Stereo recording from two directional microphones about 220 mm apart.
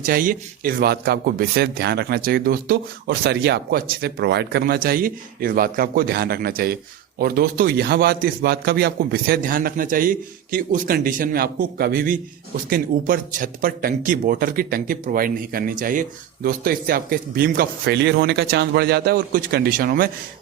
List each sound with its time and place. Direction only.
0.0 s a man's voice: 40° right (ahead or behind)